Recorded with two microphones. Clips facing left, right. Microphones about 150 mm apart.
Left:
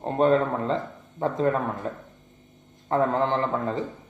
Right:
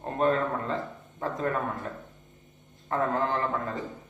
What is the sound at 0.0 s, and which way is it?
Speech, 25° left (ahead or behind).